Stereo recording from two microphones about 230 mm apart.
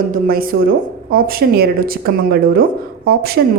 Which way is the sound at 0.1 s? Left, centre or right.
Right.